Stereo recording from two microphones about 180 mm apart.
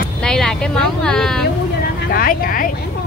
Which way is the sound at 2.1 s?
50° left (ahead or behind).